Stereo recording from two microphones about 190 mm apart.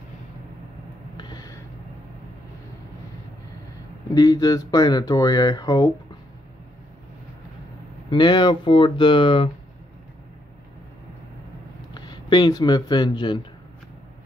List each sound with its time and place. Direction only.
1.1 s a sound: 20° left (ahead or behind)
4.1 s speech: 20° left (ahead or behind)
8.1 s speech: 25° left (ahead or behind)
11.9 s speech: 20° left (ahead or behind)